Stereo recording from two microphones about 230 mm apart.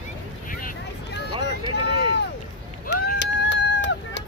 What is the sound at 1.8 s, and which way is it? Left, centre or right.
Run, right.